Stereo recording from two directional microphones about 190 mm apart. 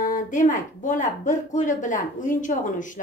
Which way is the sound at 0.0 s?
45° left (ahead or behind).